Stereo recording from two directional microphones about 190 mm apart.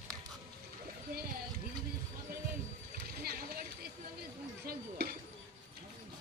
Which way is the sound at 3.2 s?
55° right (ahead or behind).